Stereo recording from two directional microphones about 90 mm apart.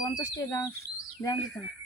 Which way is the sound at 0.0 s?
35° left (ahead or behind).